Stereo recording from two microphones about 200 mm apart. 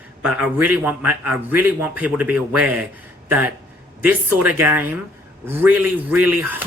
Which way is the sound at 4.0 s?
10° right (ahead or behind).